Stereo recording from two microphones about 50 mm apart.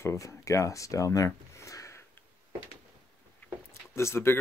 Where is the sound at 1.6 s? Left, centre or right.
Left.